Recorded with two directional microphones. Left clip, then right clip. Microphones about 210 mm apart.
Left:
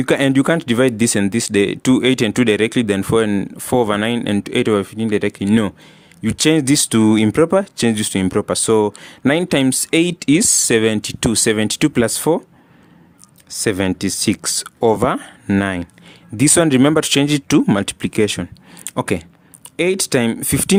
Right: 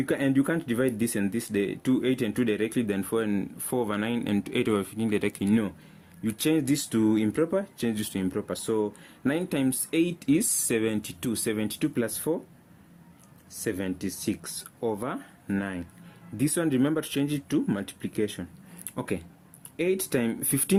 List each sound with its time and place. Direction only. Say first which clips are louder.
0.0 s speech: left 11 dB; 45° left (ahead or behind)
13.7 s speech: left 13 dB; 45° left (ahead or behind)